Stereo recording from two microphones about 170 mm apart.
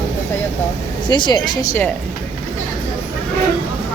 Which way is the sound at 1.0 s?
25° left (ahead or behind).